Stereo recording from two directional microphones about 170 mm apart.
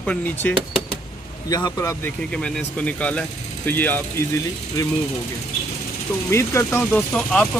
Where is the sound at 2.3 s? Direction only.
5° left (ahead or behind).